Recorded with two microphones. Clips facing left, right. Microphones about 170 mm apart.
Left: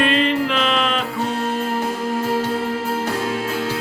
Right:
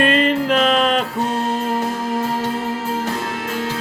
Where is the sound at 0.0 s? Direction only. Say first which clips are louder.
Right 2 dB; 45° right (ahead or behind).